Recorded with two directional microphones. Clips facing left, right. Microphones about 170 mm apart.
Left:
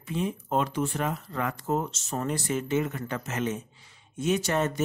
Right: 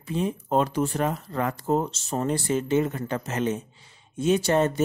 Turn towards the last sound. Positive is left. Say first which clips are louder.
# right 5 dB
turn(degrees=-30)  # may be behind; listen again after turning